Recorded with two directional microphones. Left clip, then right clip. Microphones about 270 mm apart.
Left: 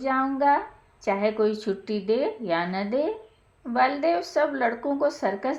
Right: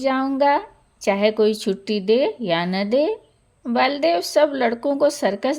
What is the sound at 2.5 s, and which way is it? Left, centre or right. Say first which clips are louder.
A woman's voice: right 6 dB; right.